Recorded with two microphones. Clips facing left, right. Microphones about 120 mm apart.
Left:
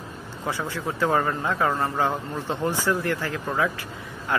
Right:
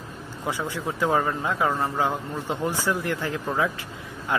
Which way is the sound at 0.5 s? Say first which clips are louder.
Even; 15° right (ahead or behind).